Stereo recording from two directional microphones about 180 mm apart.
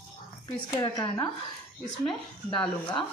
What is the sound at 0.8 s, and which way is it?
Speech, 20° left (ahead or behind).